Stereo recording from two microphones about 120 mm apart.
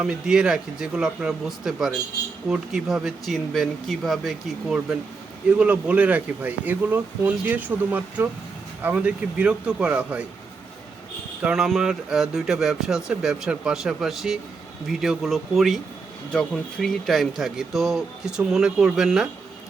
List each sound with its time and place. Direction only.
0.0 s speech: 5° right (ahead or behind)
11.4 s speech: 5° right (ahead or behind)